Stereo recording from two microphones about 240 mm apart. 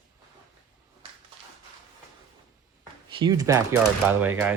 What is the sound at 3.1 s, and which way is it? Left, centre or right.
Speech, centre.